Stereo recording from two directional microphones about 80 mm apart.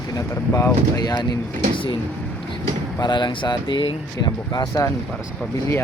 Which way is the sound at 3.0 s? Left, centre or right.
Left.